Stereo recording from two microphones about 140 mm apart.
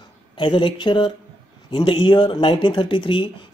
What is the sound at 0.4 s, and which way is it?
Speech, 35° left (ahead or behind).